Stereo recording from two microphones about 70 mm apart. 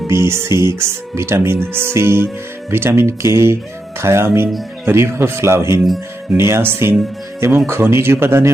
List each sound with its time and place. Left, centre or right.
0.1 s speech: right